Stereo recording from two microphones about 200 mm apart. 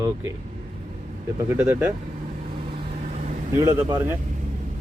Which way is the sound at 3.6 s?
15° right (ahead or behind).